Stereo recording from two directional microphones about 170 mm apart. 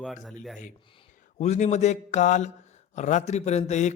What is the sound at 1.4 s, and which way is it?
Speech, 40° left (ahead or behind).